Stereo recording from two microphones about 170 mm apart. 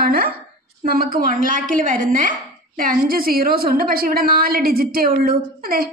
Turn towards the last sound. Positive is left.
turn(degrees=-60)  # may be behind; listen again after turning